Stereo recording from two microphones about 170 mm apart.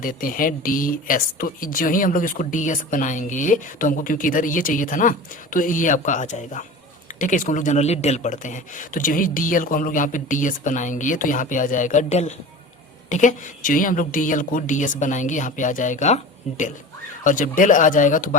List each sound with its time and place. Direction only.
0.0 s speech: 55° left (ahead or behind)